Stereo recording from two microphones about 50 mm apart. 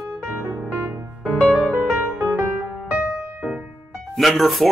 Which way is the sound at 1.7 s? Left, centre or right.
Right.